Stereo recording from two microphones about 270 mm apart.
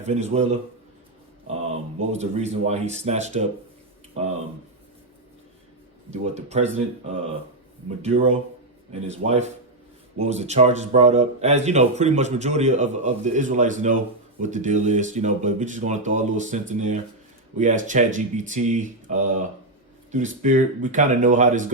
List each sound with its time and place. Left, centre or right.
0.0 s speech: right
2.0 s speech: right
6.1 s speech: right
8.0 s speech: right